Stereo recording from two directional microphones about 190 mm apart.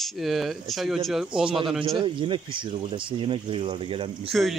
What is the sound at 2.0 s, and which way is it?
Speech, 25° right (ahead or behind).